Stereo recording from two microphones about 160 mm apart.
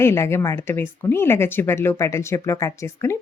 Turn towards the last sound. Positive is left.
turn(degrees=15)  # may be behind; listen again after turning